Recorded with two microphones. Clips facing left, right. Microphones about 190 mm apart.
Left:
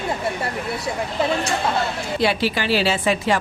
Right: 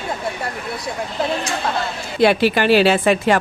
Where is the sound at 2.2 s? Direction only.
55° right (ahead or behind).